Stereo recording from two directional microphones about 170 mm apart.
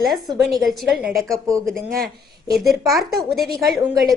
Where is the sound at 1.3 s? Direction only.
20° right (ahead or behind).